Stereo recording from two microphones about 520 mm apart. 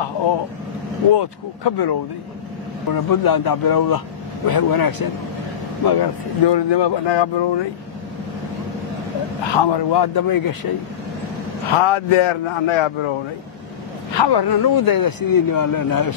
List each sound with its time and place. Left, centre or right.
1.1 s a man's voice: left
9.4 s speech: left
11.7 s a man's voice: left
14.1 s a man's voice: left